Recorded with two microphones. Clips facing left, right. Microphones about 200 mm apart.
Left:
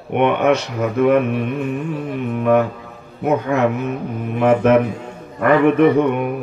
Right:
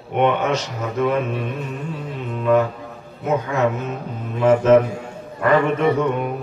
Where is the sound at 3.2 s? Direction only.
60° left (ahead or behind).